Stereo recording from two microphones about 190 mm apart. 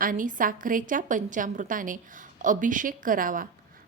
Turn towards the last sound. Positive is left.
turn(degrees=-45)  # may be behind; listen again after turning